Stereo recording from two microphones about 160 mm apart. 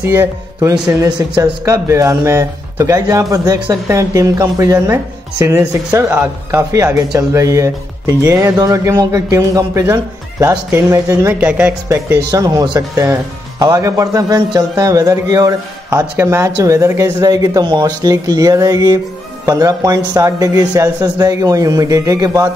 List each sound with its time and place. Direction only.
0.0 s speech: 15° right (ahead or behind)